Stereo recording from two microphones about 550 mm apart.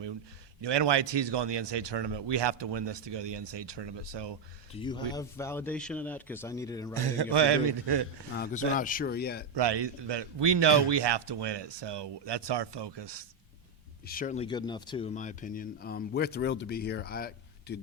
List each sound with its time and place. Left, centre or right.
0.6 s a man's voice: right
4.7 s a man's voice: centre
6.9 s a man's voice: right
8.4 s speech: centre
9.6 s a man's voice: right
14.1 s speech: centre